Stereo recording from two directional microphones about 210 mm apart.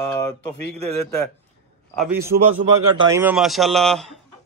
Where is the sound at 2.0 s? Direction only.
10° right (ahead or behind).